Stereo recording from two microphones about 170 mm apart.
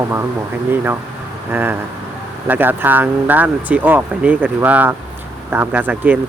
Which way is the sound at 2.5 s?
10° right (ahead or behind).